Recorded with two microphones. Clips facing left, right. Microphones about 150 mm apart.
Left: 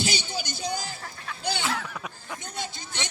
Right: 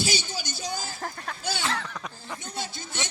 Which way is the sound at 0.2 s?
15° left (ahead or behind).